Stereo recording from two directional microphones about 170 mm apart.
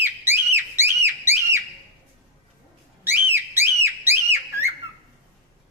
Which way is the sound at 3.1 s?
15° right (ahead or behind).